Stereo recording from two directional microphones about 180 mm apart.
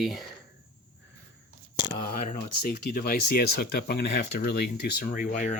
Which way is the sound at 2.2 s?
50° left (ahead or behind).